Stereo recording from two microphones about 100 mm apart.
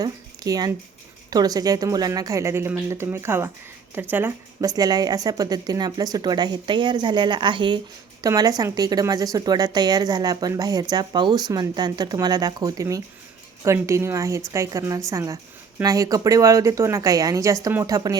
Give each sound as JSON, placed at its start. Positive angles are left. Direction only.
{"t": 0.0, "sound": "a woman's voice", "side_deg": -40}
{"t": 4.6, "sound": "a woman's voice", "side_deg": -40}
{"t": 8.2, "sound": "a woman's voice", "side_deg": -40}